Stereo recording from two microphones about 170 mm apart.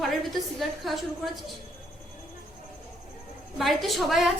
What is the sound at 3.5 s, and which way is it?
Speech, centre (ahead or behind).